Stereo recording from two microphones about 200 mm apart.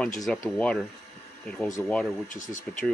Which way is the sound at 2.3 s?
40° left (ahead or behind).